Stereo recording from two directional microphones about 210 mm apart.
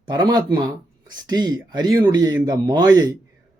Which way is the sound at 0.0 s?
20° right (ahead or behind).